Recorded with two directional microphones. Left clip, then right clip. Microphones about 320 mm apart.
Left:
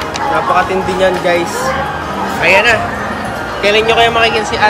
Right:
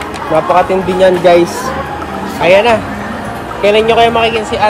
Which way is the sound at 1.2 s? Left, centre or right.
Right.